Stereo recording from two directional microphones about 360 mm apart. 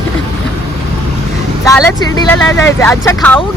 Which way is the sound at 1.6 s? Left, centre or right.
Centre.